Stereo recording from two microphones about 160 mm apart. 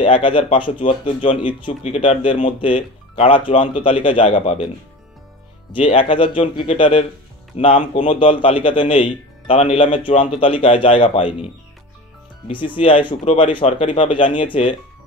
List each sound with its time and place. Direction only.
0.0 s speech: 35° left (ahead or behind)
5.7 s speech: 35° left (ahead or behind)
12.4 s speech: 30° left (ahead or behind)